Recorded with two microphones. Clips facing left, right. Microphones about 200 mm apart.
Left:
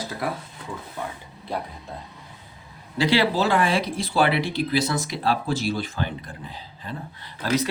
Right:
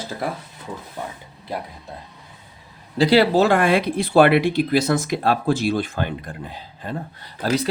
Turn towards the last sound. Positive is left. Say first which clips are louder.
# right 2 dB
turn(degrees=-45)  # may be behind; listen again after turning